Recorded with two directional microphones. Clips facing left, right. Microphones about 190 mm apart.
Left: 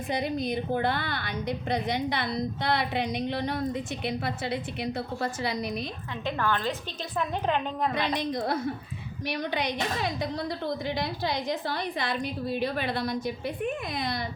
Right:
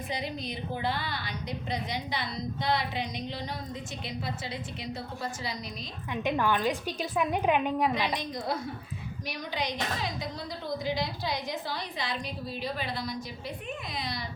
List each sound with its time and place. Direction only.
0.1 s a woman's voice: 50° left (ahead or behind)
6.2 s a woman's voice: 15° right (ahead or behind)
8.1 s a woman's voice: 60° left (ahead or behind)